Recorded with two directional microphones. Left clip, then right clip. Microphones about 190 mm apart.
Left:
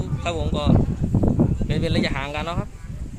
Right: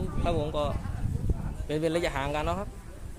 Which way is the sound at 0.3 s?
Centre (ahead or behind).